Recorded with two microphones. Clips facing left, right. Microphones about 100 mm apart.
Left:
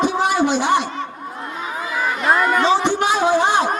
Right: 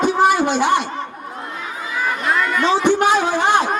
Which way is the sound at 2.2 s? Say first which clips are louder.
Left 4 dB; 35° left (ahead or behind).